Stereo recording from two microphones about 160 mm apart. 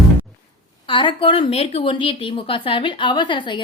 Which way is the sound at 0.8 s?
30° left (ahead or behind).